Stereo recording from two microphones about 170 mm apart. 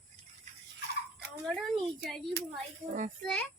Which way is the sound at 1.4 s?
Centre (ahead or behind).